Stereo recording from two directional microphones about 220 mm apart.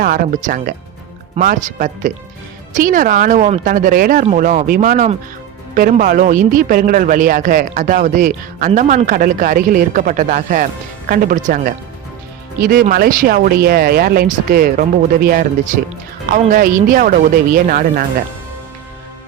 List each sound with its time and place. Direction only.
0.0 s a man's voice: 40° right (ahead or behind)